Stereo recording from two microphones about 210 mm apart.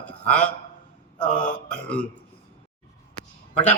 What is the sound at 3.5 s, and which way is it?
Speech, 35° left (ahead or behind).